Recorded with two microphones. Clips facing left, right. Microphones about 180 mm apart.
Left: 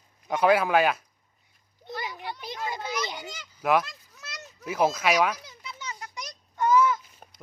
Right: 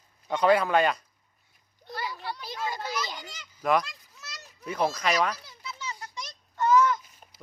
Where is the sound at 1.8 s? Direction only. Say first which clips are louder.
Even; 20° left (ahead or behind).